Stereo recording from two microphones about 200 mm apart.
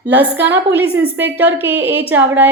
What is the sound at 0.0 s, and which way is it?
A woman's voice, 5° right (ahead or behind).